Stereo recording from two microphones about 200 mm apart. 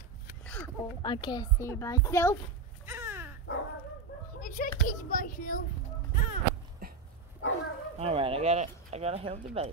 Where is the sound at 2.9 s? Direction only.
10° right (ahead or behind).